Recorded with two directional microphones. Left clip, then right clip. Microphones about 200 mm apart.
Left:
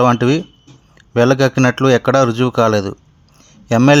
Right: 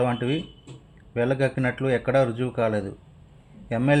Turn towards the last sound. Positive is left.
turn(degrees=45)  # may be behind; listen again after turning